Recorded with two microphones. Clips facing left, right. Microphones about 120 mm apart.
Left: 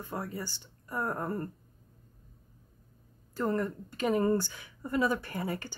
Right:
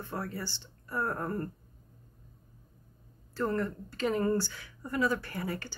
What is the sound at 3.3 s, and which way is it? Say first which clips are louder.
Speech: left 1 dB; 15° left (ahead or behind).